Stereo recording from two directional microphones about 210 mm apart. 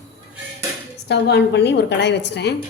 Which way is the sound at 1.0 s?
55° left (ahead or behind).